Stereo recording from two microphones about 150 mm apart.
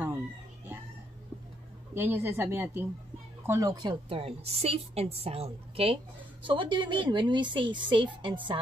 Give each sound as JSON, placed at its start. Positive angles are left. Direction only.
{"t": 2.0, "sound": "a woman's voice", "side_deg": -15}